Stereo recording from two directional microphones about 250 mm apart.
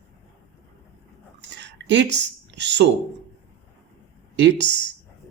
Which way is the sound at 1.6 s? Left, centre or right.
Right.